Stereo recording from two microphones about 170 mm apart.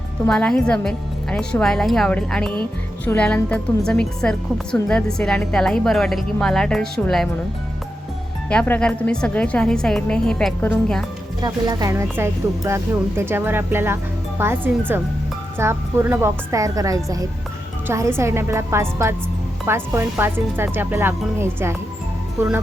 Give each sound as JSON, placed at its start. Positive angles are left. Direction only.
{"t": 0.3, "sound": "a woman's voice", "side_deg": 5}
{"t": 8.4, "sound": "a woman's voice", "side_deg": 10}
{"t": 11.3, "sound": "speech", "side_deg": -25}